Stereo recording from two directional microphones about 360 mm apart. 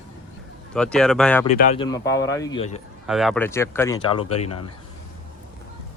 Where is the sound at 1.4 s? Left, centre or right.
Centre.